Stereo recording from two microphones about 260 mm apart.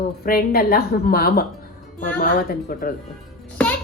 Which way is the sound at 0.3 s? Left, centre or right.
Left.